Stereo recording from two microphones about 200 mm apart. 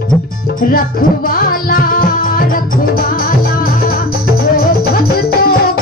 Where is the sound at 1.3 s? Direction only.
45° left (ahead or behind).